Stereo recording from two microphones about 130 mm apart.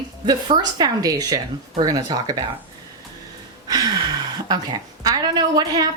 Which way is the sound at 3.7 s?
30° right (ahead or behind).